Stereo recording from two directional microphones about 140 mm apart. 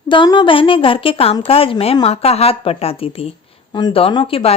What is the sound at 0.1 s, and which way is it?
A woman's voice, 35° left (ahead or behind).